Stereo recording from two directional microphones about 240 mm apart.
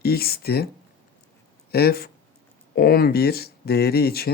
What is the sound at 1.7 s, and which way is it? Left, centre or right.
Speech, left.